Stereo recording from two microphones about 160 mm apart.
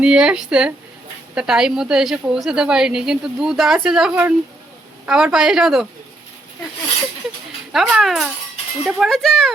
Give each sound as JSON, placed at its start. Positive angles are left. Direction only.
{"t": 0.0, "sound": "a woman's voice", "side_deg": -5}
{"t": 4.1, "sound": "a woman's voice", "side_deg": -15}
{"t": 5.0, "sound": "a woman's voice", "side_deg": -5}
{"t": 7.7, "sound": "a woman's voice", "side_deg": 0}